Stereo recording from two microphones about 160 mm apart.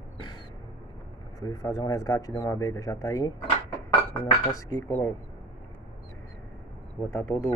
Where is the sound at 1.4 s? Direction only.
20° left (ahead or behind).